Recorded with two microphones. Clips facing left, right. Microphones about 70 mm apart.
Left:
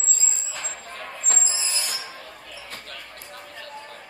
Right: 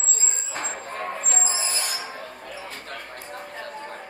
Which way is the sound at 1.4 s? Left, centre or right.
Right.